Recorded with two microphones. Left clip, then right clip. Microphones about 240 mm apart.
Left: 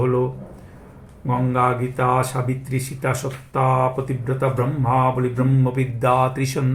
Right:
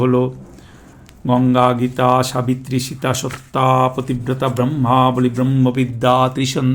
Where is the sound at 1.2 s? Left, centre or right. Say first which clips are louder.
Right 6 dB; right.